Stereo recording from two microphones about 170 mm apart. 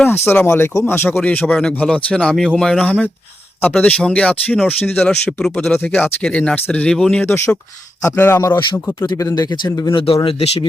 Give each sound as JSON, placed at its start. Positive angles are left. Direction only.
{"t": 0.3, "sound": "speech", "side_deg": 15}